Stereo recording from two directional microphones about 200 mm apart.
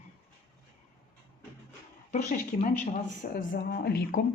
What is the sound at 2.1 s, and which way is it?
A woman's voice, 40° left (ahead or behind).